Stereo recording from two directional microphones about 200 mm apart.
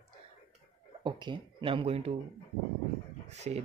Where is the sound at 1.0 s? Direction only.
25° right (ahead or behind).